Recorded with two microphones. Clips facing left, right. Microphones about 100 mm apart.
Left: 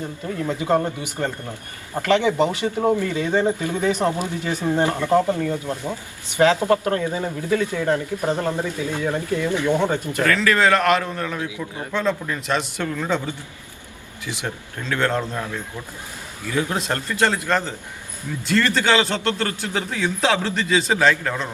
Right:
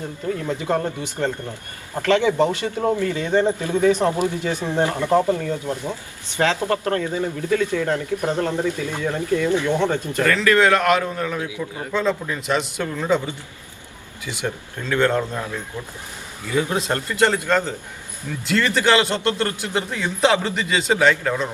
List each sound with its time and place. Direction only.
0.4 s speech: 10° left (ahead or behind)
4.9 s speech: 15° right (ahead or behind)
5.3 s speech: 15° left (ahead or behind)
10.2 s a man's voice: centre (ahead or behind)
14.8 s speech: 10° right (ahead or behind)
16.6 s a man's voice: 5° right (ahead or behind)